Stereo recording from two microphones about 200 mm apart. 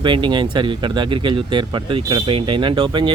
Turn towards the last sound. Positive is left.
turn(degrees=-25)  # may be behind; listen again after turning